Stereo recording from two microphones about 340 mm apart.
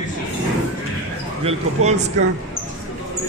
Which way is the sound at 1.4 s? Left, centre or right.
Centre.